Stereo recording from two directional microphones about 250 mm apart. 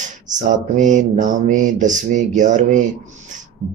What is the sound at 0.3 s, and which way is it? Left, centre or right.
Speech, right.